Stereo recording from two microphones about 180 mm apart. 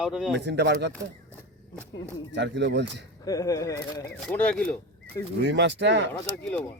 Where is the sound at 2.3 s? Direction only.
80° right.